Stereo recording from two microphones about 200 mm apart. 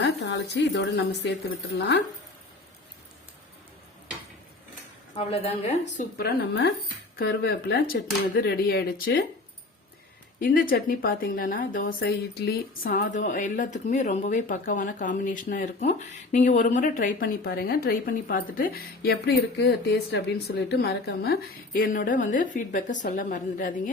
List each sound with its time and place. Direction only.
0.0 s a woman's voice: 60° left (ahead or behind)
5.1 s speech: 30° left (ahead or behind)
6.1 s speech: 50° left (ahead or behind)
10.4 s speech: 45° left (ahead or behind)
11.9 s speech: 55° left (ahead or behind)